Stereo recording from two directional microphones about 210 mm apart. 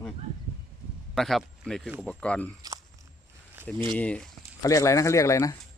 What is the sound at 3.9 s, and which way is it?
Speech, 5° left (ahead or behind).